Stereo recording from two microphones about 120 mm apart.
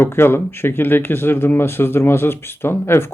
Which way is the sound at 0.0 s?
20° left (ahead or behind).